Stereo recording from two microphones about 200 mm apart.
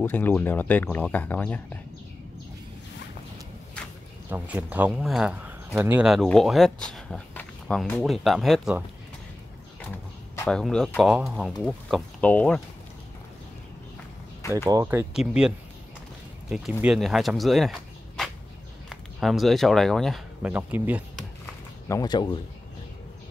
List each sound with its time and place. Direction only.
0.0 s speech: 10° left (ahead or behind)
4.3 s speech: 10° right (ahead or behind)
10.5 s speech: 5° left (ahead or behind)
14.7 s speech: 15° right (ahead or behind)
21.8 s speech: 20° left (ahead or behind)